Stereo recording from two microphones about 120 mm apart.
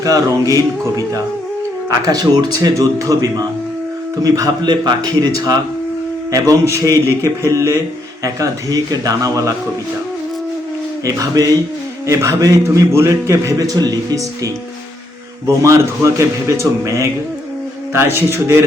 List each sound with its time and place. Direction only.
0.0 s a man's voice: 30° right (ahead or behind)
11.0 s a man's voice: 30° right (ahead or behind)